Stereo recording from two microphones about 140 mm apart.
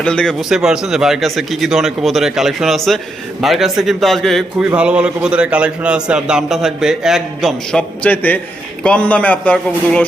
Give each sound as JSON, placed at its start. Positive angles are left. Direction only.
{"t": 0.0, "sound": "a man's voice", "side_deg": 5}